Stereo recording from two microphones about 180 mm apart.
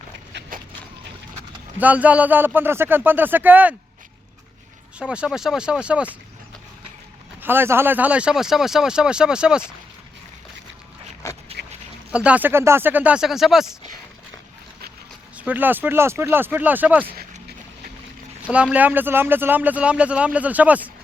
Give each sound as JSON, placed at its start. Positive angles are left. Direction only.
{"t": 0.3, "sound": "dog", "side_deg": -80}
{"t": 1.8, "sound": "speech", "side_deg": -10}
{"t": 4.9, "sound": "speech", "side_deg": -5}
{"t": 7.4, "sound": "speech", "side_deg": -10}
{"t": 11.2, "sound": "a sound", "side_deg": 15}
{"t": 12.1, "sound": "speech", "side_deg": -5}
{"t": 15.4, "sound": "speech", "side_deg": -10}
{"t": 18.4, "sound": "speech", "side_deg": -5}